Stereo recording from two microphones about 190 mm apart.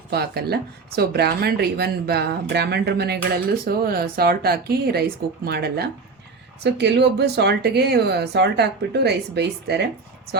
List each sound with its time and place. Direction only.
0.1 s speech: 55° right (ahead or behind)